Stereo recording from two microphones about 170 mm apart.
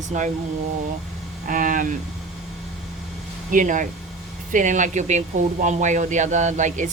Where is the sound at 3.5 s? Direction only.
50° right (ahead or behind).